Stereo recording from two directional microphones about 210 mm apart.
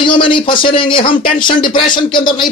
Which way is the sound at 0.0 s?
25° left (ahead or behind).